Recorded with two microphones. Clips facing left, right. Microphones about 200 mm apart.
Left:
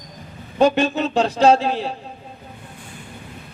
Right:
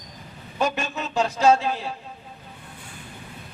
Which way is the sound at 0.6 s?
35° left (ahead or behind).